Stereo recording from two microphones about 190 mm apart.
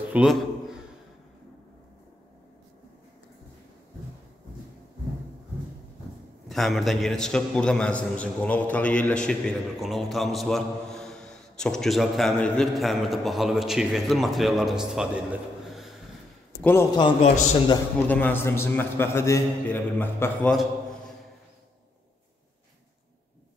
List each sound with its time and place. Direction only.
0.1 s a sound: 5° right (ahead or behind)
6.5 s a man's voice: centre (ahead or behind)
16.9 s a man's voice: 25° left (ahead or behind)
18.0 s a man's voice: 10° left (ahead or behind)